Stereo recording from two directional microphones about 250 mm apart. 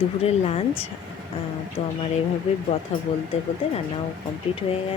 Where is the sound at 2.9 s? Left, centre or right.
Left.